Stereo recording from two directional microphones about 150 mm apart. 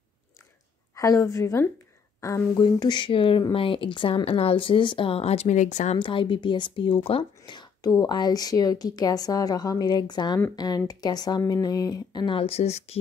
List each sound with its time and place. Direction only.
0.9 s speech: 20° left (ahead or behind)
2.6 s speech: 30° left (ahead or behind); by 5.9 s 50° left (ahead or behind)
5.9 s speech: 35° left (ahead or behind)